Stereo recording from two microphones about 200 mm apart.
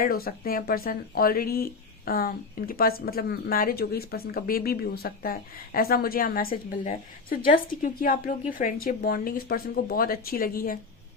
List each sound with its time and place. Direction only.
0.0 s speech: 50° left (ahead or behind)